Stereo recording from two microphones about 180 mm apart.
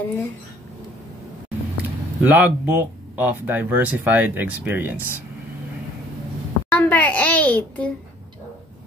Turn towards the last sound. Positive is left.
turn(degrees=10)  # may be behind; listen again after turning